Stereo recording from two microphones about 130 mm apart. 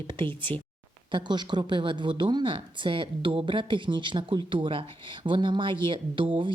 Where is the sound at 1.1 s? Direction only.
35° right (ahead or behind).